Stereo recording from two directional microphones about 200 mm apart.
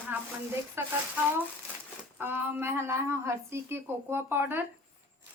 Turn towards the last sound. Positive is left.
turn(degrees=-10)  # may be behind; listen again after turning